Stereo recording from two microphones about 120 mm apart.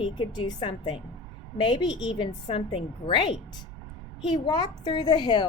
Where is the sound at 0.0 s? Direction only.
40° left (ahead or behind).